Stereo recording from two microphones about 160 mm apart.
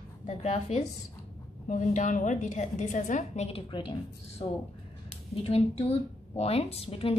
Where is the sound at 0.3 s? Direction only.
45° left (ahead or behind).